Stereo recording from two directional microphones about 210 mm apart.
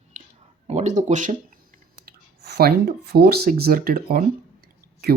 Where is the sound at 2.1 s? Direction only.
50° right (ahead or behind).